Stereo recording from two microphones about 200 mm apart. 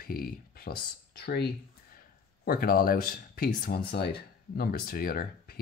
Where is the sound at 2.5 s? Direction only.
45° left (ahead or behind).